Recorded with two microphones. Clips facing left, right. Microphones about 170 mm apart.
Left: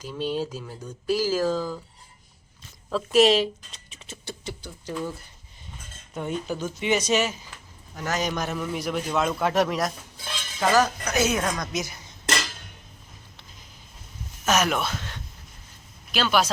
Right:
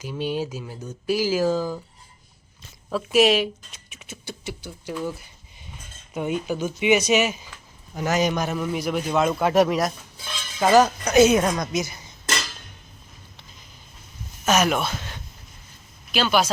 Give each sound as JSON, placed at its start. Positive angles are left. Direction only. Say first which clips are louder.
{"t": 0.0, "sound": "a man's voice", "louder": "right 1 dB", "side_deg": -5}
{"t": 2.9, "sound": "a man's voice", "louder": "even", "side_deg": -5}
{"t": 10.6, "sound": "speech", "louder": "right 5 dB", "side_deg": -25}
{"t": 11.7, "sound": "a man's voice", "louder": "right 4 dB", "side_deg": 0}
{"t": 14.4, "sound": "a sound", "louder": "right 3 dB", "side_deg": -5}
{"t": 16.1, "sound": "a man's voice", "louder": "right 2 dB", "side_deg": 0}